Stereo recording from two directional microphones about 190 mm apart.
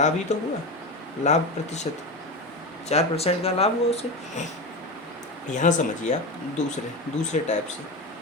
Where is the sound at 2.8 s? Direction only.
35° left (ahead or behind).